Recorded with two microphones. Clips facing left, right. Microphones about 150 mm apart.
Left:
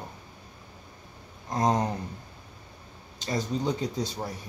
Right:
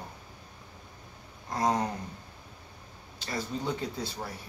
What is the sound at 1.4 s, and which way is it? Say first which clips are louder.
Speech: left 3 dB; 20° left (ahead or behind).